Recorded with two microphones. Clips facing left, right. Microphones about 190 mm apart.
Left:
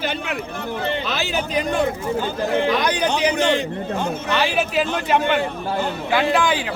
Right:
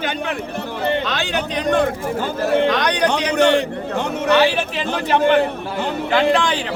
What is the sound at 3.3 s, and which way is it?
A man's voice, 70° right (ahead or behind).